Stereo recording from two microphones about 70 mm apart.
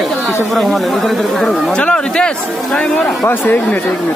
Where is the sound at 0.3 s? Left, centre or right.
Centre.